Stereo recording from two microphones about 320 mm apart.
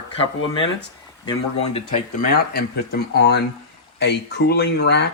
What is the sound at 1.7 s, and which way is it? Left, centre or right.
Speech, left.